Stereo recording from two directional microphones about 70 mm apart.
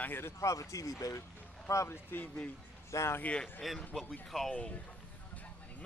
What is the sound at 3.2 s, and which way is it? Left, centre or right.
Speech, left.